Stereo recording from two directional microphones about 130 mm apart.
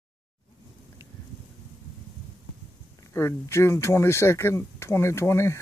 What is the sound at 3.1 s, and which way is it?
Speech, 20° left (ahead or behind).